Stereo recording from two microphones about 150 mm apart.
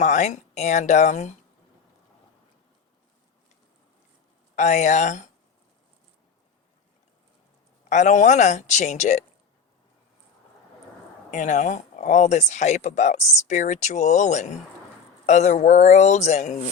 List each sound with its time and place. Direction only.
0.0 s speech: 55° left (ahead or behind)
4.5 s speech: 55° left (ahead or behind)
7.9 s speech: 55° left (ahead or behind)
11.3 s speech: 55° left (ahead or behind)